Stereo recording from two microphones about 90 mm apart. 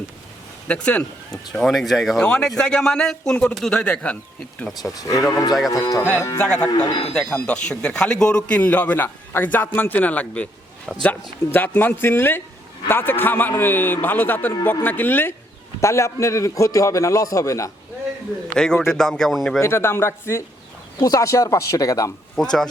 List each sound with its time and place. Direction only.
0.7 s a man's voice: 10° left (ahead or behind)
5.3 s livestock: 45° left (ahead or behind)
5.7 s a man's voice: 40° left (ahead or behind)
6.4 s a man's voice: 10° left (ahead or behind)
6.7 s livestock: 50° left (ahead or behind)
7.1 s a man's voice: 15° left (ahead or behind)
10.9 s speech: centre (ahead or behind)
11.5 s a man's voice: 20° left (ahead or behind); by 17.7 s 35° left (ahead or behind)
18.5 s a man's voice: 10° left (ahead or behind)
19.5 s a man's voice: 30° left (ahead or behind)
22.4 s a man's voice: 5° left (ahead or behind)